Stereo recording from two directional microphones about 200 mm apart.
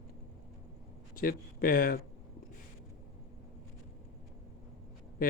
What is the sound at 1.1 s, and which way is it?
Speech, 45° left (ahead or behind).